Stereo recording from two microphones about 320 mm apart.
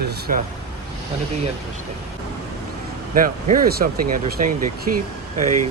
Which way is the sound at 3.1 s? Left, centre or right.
Right.